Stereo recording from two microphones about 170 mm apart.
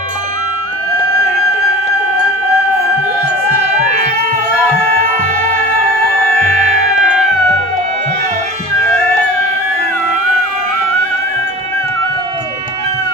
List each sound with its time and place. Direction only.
6.5 s music: 45° right (ahead or behind)